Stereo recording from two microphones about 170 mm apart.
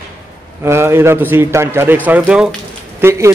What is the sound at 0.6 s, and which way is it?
A man's voice, 15° right (ahead or behind).